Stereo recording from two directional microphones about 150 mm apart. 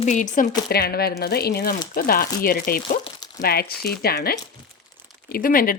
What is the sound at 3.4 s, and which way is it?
Speech, 90° left.